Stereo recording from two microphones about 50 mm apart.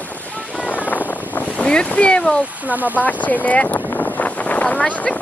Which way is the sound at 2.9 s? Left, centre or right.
Left.